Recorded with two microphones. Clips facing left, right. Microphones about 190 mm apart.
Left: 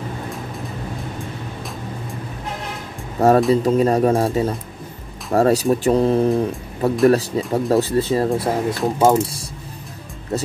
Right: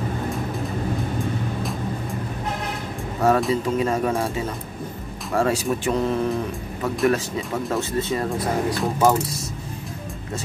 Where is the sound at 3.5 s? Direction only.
35° left (ahead or behind).